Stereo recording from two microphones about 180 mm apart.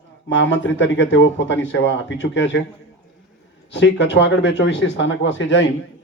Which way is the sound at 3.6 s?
80° left.